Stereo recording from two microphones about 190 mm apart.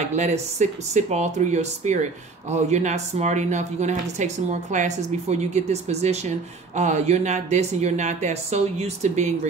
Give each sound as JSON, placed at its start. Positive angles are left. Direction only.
{"t": 0.1, "sound": "speech", "side_deg": -35}